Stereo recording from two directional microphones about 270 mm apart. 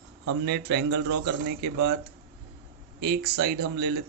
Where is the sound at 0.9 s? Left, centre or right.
Right.